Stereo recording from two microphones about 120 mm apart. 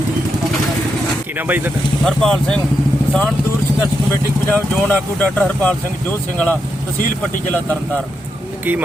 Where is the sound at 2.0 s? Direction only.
5° left (ahead or behind).